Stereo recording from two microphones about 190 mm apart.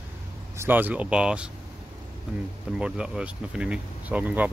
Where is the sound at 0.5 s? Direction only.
10° right (ahead or behind).